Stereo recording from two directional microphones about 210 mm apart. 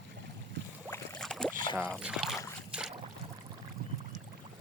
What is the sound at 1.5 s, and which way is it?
Rowboat, 20° left (ahead or behind).